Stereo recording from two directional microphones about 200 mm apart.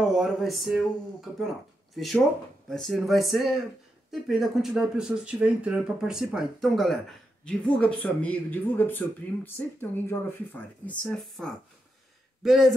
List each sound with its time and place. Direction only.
0.0 s speech: centre (ahead or behind)
2.0 s speech: centre (ahead or behind)